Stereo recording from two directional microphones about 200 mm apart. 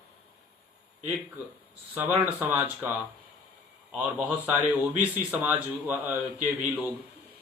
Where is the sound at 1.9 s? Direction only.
10° right (ahead or behind).